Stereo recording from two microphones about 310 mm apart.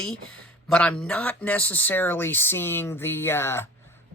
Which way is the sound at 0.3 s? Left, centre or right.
Centre.